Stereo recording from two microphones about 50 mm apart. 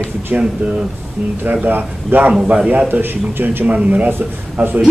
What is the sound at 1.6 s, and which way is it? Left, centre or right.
A man's voice, right.